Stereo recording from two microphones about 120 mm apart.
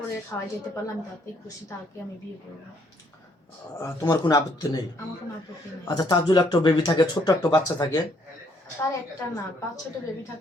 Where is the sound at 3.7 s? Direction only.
30° left (ahead or behind).